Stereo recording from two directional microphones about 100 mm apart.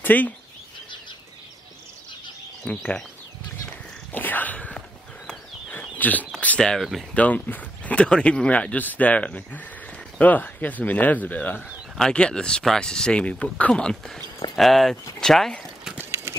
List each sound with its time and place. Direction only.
0.0 s speech: 15° left (ahead or behind)
2.6 s speech: 10° left (ahead or behind)
4.1 s a sound: 20° left (ahead or behind)
6.3 s speech: 10° left (ahead or behind)
7.2 s speech: 15° left (ahead or behind)
16.0 s a sound: 25° right (ahead or behind)